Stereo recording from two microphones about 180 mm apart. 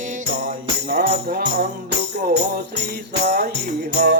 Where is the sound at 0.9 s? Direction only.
60° right (ahead or behind).